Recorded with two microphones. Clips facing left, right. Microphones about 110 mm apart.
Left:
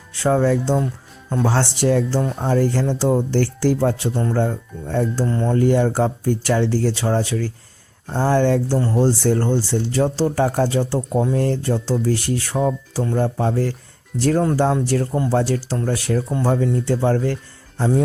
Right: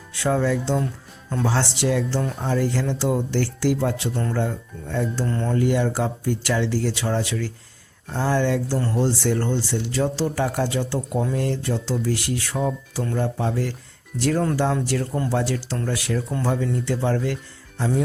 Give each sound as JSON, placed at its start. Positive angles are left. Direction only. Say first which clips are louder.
{"t": 0.2, "sound": "speech", "louder": "left 4 dB", "side_deg": 35}
{"t": 1.5, "sound": "speech", "louder": "left 5 dB", "side_deg": 45}
{"t": 5.2, "sound": "speech", "louder": "left 4 dB", "side_deg": 30}
{"t": 17.7, "sound": "music", "louder": "left 4 dB", "side_deg": 30}